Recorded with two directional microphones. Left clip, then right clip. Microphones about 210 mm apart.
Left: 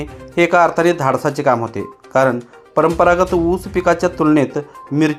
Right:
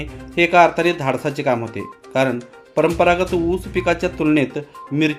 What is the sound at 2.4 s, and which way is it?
Speech, 5° left (ahead or behind).